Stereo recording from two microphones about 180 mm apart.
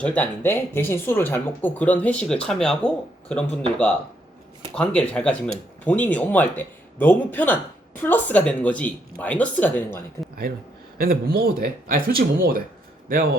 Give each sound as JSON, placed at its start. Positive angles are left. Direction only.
{"t": 0.0, "sound": "speech", "side_deg": 10}
{"t": 11.0, "sound": "a man's voice", "side_deg": -55}